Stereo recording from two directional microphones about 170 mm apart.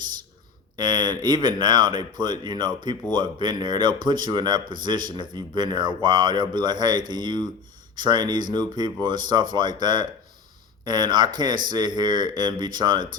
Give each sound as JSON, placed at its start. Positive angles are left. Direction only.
{"t": 0.8, "sound": "speech", "side_deg": -25}